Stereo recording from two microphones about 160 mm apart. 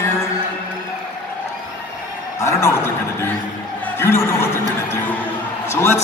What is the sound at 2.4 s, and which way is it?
Speech, 15° left (ahead or behind).